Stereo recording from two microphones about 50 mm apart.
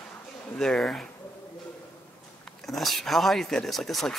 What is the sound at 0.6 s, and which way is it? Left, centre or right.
Speech, centre.